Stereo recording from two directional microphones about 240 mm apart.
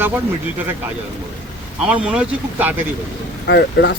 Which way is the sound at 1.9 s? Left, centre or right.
Centre.